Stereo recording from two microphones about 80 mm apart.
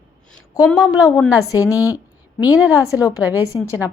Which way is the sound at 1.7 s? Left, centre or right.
Left.